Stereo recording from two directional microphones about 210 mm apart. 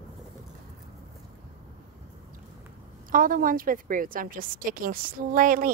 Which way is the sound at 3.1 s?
40° right (ahead or behind).